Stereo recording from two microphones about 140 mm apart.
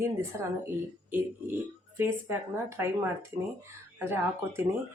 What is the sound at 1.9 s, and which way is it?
A woman's voice, 20° right (ahead or behind).